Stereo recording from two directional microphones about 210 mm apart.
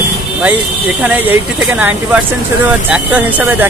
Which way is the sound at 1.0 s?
10° right (ahead or behind).